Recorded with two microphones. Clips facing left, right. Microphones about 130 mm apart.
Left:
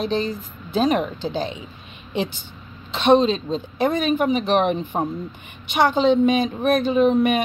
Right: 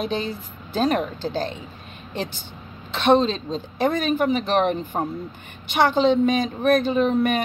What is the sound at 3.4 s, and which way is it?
Speech, centre (ahead or behind).